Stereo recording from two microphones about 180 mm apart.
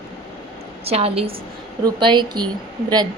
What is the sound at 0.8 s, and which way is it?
A woman's voice, 35° right (ahead or behind).